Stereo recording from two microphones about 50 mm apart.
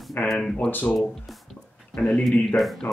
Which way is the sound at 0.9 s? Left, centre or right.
Centre.